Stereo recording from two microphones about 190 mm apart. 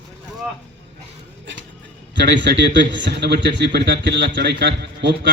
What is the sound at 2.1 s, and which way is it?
A man's voice, 65° right (ahead or behind).